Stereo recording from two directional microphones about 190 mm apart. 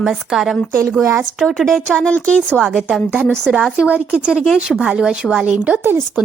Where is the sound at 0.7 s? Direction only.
15° right (ahead or behind).